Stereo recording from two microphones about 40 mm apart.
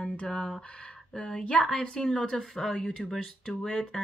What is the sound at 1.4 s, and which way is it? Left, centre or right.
Speech, left.